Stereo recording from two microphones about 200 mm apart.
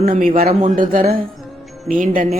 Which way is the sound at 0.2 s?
45° right (ahead or behind).